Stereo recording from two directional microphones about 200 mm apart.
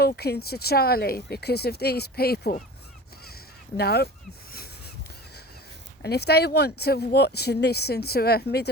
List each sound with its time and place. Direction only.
0.0 s speech: 50° left (ahead or behind)
3.8 s speech: 55° left (ahead or behind)
6.0 s speech: 55° left (ahead or behind)